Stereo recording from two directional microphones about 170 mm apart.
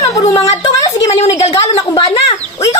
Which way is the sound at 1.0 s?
40° left (ahead or behind).